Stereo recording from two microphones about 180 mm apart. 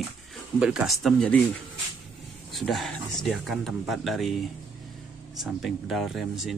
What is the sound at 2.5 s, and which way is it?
Speech, centre (ahead or behind).